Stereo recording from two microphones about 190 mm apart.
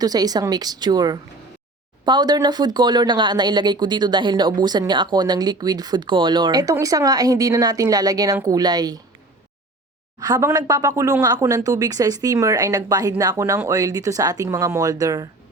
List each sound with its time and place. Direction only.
0.0 s speech: 20° right (ahead or behind)
10.2 s speech: 20° right (ahead or behind)